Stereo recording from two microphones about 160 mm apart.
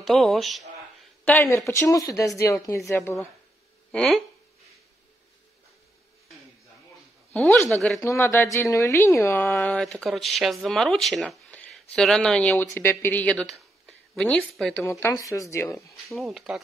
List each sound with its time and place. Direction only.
0.0 s speech: centre (ahead or behind)
1.2 s speech: 15° left (ahead or behind)
3.9 s speech: centre (ahead or behind)
7.3 s speech: 10° left (ahead or behind)
8.0 s speech: 20° left (ahead or behind)
14.9 s speech: 15° left (ahead or behind)
16.1 s speech: centre (ahead or behind)